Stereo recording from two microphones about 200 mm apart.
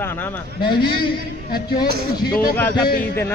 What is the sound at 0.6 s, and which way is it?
Speech, 20° left (ahead or behind).